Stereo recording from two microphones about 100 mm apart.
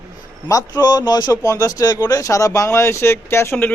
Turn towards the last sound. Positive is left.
turn(degrees=25)  # may be behind; listen again after turning